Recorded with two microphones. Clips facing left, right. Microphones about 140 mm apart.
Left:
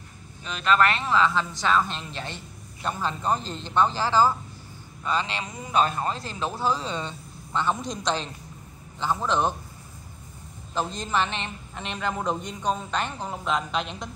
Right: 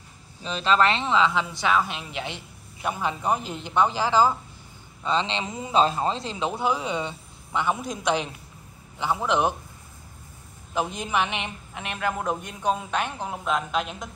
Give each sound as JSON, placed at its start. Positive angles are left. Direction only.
{"t": 0.4, "sound": "a man's voice", "side_deg": -30}
{"t": 10.7, "sound": "a man's voice", "side_deg": -10}